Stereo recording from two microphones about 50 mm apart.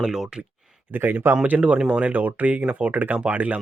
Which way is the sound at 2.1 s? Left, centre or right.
Right.